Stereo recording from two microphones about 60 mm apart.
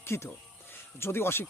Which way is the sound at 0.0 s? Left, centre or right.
Left.